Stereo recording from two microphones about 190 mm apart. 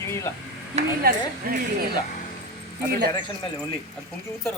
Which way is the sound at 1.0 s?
50° right (ahead or behind).